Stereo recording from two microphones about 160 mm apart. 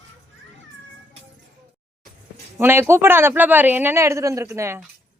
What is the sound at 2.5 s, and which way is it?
A man's voice, 15° right (ahead or behind).